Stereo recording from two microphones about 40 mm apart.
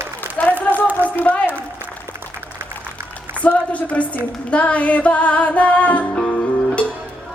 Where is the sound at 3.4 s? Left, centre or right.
Left.